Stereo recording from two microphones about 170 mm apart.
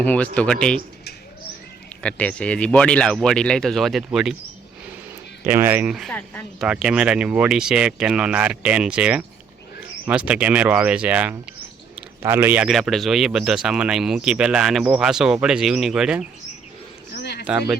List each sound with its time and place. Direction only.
0.0 s a man's voice: 10° left (ahead or behind)
2.0 s a man's voice: 5° left (ahead or behind)
5.4 s a man's voice: 10° right (ahead or behind)
17.2 s a sound: 70° left (ahead or behind)
17.4 s speech: 5° right (ahead or behind)